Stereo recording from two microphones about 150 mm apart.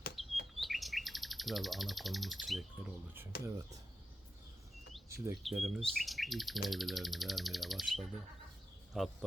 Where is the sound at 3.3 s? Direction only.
90° left.